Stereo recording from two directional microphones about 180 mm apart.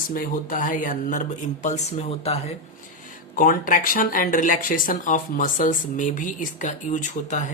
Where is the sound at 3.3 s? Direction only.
50° left (ahead or behind).